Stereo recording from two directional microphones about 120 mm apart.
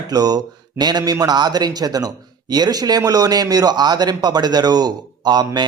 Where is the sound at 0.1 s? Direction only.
35° right (ahead or behind).